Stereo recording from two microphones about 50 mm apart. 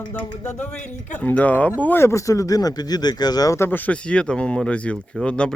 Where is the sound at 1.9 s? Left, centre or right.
Left.